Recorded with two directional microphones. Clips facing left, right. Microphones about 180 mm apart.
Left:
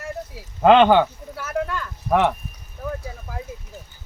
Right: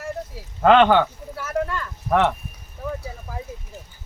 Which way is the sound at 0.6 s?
15° left (ahead or behind).